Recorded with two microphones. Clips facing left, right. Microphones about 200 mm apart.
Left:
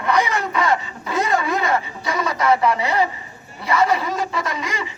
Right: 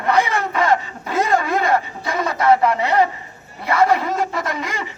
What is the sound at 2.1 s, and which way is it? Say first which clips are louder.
A man's voice: right 3 dB; 50° right (ahead or behind).